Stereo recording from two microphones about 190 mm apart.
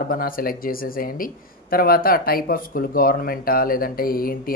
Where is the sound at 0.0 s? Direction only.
50° left (ahead or behind).